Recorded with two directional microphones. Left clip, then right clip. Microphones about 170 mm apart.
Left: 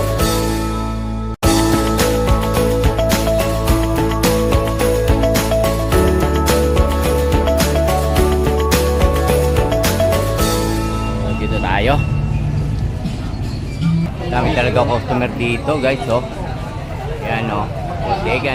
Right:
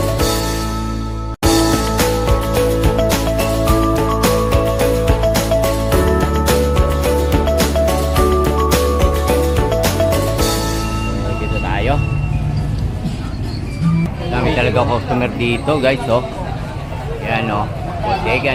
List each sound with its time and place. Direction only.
1.4 s music: centre (ahead or behind)
11.6 s music: 30° left (ahead or behind)
14.3 s a man's voice: centre (ahead or behind)
17.2 s a sound: 5° right (ahead or behind)
18.3 s speech: 5° right (ahead or behind)